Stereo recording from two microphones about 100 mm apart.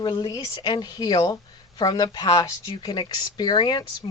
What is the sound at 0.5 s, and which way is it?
Speech, 50° left (ahead or behind).